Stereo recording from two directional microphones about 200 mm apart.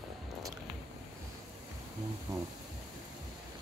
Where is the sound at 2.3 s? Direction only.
15° right (ahead or behind).